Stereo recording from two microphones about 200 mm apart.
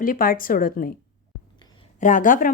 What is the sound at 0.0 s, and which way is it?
Speech, 45° left (ahead or behind).